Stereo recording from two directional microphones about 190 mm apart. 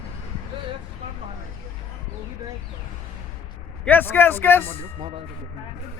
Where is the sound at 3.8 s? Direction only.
10° left (ahead or behind).